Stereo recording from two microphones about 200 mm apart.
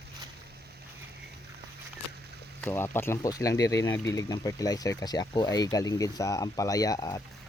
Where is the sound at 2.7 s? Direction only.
10° left (ahead or behind).